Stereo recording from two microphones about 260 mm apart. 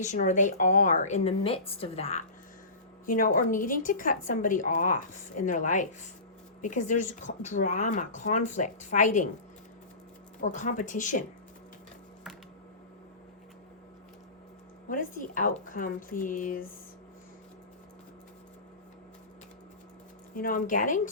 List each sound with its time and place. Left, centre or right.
0.0 s a woman's voice: left
10.4 s speech: left
14.8 s a woman's voice: left
20.3 s a woman's voice: left